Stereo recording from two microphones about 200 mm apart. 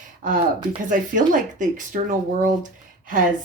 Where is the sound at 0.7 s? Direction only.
40° right (ahead or behind).